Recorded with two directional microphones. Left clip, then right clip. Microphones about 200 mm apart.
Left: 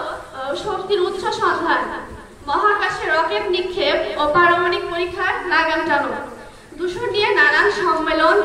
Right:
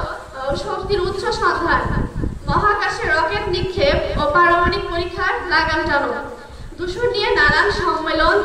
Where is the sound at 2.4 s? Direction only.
30° right (ahead or behind).